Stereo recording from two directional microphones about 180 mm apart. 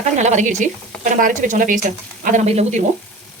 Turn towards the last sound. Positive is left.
turn(degrees=-40)  # may be behind; listen again after turning